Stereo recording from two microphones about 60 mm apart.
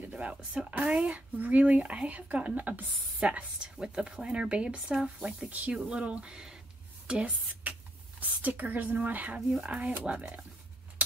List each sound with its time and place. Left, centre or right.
0.1 s speech: right
5.5 s speech: right